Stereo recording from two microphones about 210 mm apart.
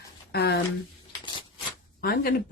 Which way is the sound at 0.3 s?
50° left (ahead or behind).